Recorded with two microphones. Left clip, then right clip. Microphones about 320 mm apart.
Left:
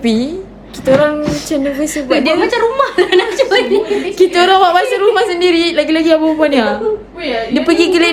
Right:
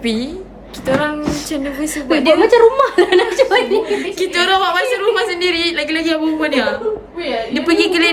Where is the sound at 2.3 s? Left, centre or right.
Right.